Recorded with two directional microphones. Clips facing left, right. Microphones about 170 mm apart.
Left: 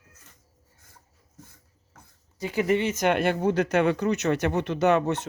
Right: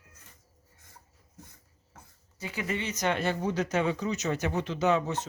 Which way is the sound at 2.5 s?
55° left (ahead or behind).